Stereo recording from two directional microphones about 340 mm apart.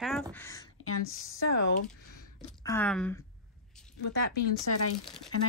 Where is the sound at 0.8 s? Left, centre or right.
Left.